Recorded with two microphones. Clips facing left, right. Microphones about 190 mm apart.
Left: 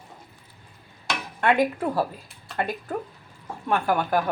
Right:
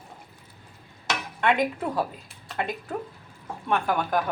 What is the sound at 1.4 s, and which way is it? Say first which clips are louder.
Speech: left 3 dB; 5° left (ahead or behind).